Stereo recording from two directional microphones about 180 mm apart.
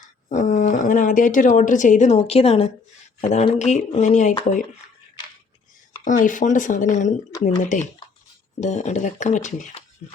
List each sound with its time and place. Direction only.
0.3 s speech: 40° left (ahead or behind)
6.1 s speech: 45° left (ahead or behind)